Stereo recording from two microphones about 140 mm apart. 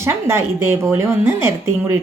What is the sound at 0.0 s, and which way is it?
A woman's voice, 20° right (ahead or behind).